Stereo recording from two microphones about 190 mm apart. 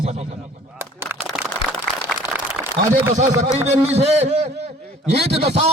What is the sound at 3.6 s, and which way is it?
Speech, 35° right (ahead or behind).